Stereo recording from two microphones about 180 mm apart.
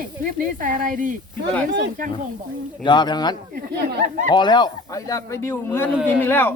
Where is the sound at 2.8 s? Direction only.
25° left (ahead or behind).